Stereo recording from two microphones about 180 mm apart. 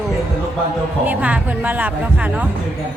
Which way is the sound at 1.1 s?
10° right (ahead or behind).